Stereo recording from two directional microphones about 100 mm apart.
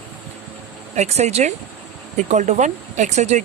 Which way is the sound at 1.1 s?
90° right.